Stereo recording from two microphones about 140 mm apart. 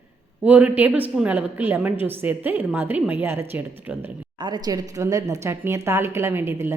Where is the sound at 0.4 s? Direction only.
10° right (ahead or behind).